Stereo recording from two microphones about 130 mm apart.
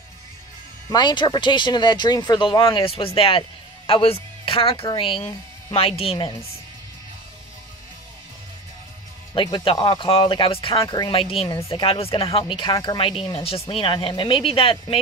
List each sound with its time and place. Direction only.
0.8 s speech: 35° left (ahead or behind)
9.3 s speech: 40° left (ahead or behind)
13.2 s speech: 50° left (ahead or behind)